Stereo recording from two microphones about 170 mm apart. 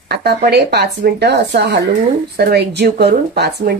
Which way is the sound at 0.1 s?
70° right (ahead or behind).